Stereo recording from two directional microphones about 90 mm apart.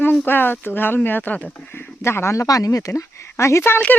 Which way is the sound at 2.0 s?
30° left (ahead or behind).